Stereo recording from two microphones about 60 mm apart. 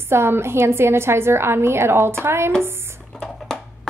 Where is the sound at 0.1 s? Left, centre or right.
Right.